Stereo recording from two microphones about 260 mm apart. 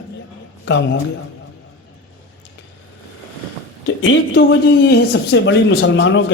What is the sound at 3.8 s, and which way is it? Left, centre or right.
Speech, left.